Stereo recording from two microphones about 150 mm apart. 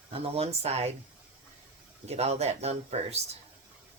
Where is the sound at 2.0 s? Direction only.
45° right (ahead or behind).